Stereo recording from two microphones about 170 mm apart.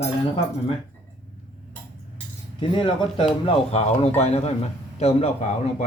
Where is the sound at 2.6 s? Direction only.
30° left (ahead or behind).